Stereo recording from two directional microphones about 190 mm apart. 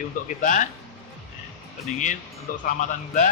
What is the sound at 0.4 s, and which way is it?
Speech, 40° left (ahead or behind).